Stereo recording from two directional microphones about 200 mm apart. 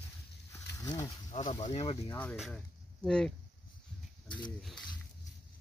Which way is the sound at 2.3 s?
Centre (ahead or behind).